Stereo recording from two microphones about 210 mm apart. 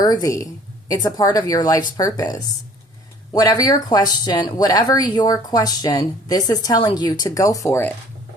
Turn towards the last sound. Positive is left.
turn(degrees=10)  # may be behind; listen again after turning